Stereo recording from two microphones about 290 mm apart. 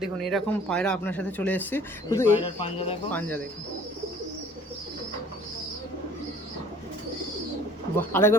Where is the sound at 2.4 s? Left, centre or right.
Centre.